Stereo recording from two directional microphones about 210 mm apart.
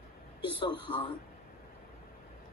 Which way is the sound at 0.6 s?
25° left (ahead or behind).